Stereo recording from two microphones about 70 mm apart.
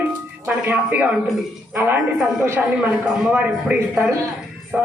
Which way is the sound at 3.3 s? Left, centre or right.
Centre.